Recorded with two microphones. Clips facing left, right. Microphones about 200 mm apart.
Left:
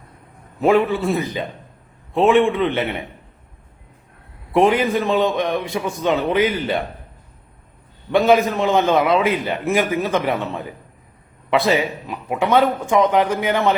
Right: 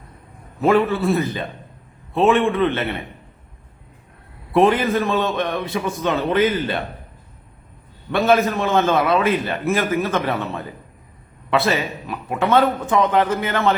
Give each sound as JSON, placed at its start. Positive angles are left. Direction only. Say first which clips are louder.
{"t": 0.6, "sound": "a man's voice", "louder": "left 1 dB", "side_deg": 15}
{"t": 4.5, "sound": "a man's voice", "louder": "even", "side_deg": 15}
{"t": 8.1, "sound": "a man's voice", "louder": "left 2 dB", "side_deg": 15}